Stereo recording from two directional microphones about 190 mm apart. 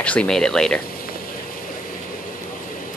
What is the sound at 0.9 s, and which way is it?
Vehicle, 50° left (ahead or behind).